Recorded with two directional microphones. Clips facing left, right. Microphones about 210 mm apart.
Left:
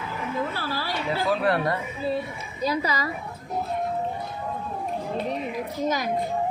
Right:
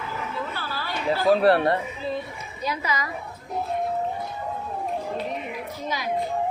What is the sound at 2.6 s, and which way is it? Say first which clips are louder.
Speech: left 3 dB; 35° left (ahead or behind).